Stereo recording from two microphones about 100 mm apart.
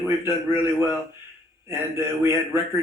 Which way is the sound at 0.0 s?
25° right (ahead or behind).